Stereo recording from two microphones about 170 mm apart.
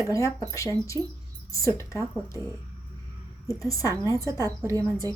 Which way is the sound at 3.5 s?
20° left (ahead or behind).